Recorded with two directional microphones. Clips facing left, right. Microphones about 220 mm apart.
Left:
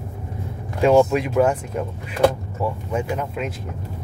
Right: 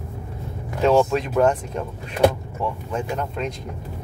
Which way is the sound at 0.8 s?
10° left (ahead or behind).